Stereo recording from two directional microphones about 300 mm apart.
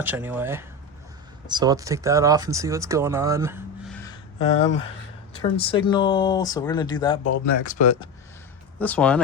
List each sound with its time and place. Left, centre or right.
0.0 s speech: centre
3.9 s a sound: centre
5.3 s speech: centre
7.3 s speech: left
8.8 s speech: centre